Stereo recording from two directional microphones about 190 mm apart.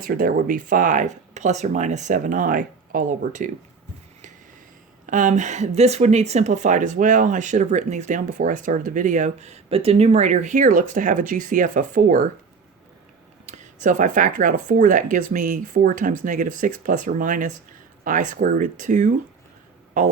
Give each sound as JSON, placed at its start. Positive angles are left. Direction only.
{"t": 0.0, "sound": "speech", "side_deg": -50}
{"t": 5.0, "sound": "speech", "side_deg": -40}
{"t": 13.4, "sound": "speech", "side_deg": -40}